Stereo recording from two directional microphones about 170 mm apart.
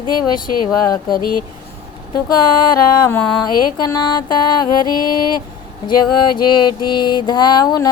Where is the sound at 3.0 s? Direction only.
10° left (ahead or behind).